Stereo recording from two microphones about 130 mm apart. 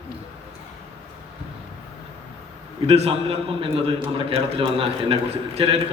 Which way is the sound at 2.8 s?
50° right (ahead or behind).